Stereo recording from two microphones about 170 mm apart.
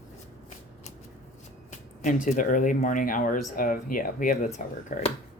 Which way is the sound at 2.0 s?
45° left (ahead or behind).